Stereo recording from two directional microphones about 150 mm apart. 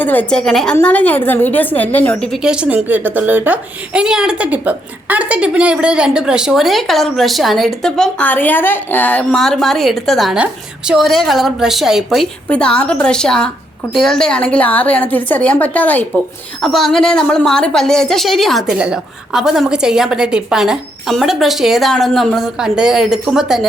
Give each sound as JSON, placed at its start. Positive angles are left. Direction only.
{"t": 0.0, "sound": "a woman's voice", "side_deg": 10}
{"t": 2.3, "sound": "a woman's voice", "side_deg": -5}